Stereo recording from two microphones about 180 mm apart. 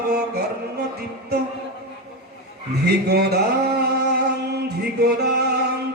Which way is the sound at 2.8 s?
65° right (ahead or behind).